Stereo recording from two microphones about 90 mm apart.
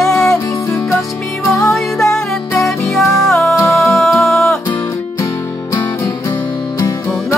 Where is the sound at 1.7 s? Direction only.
5° left (ahead or behind).